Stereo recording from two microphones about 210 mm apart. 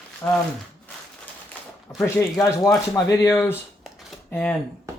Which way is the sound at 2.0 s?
15° left (ahead or behind).